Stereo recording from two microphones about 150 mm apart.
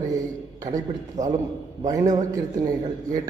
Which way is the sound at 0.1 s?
25° right (ahead or behind).